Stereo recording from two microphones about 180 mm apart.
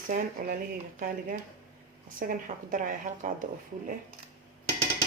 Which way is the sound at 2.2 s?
50° right (ahead or behind).